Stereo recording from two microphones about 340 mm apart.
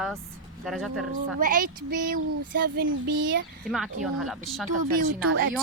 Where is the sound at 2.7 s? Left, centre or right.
Right.